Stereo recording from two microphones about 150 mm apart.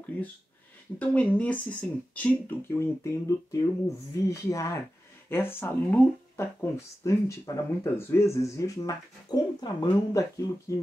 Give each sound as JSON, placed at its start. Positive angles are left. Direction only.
{"t": 0.9, "sound": "speech", "side_deg": 10}